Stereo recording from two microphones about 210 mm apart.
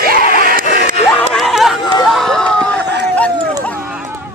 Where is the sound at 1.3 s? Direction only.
Centre (ahead or behind).